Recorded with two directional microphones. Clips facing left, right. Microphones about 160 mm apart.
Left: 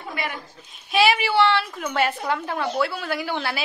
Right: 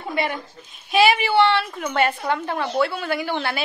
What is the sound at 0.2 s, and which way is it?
Speech, 25° right (ahead or behind).